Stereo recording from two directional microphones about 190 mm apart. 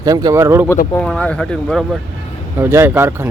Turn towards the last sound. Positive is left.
turn(degrees=-10)  # may be behind; listen again after turning